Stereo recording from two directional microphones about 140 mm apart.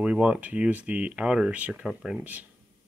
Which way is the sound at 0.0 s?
5° right (ahead or behind).